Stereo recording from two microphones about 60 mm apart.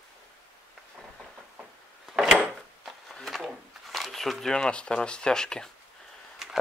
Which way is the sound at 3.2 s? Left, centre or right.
Centre.